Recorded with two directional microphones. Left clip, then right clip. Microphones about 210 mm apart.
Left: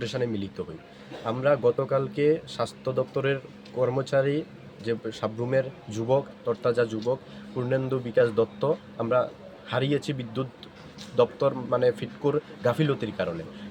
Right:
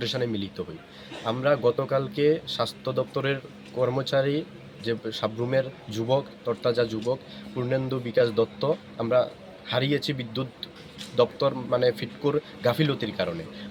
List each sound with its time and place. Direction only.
0.0 s speech: 5° left (ahead or behind)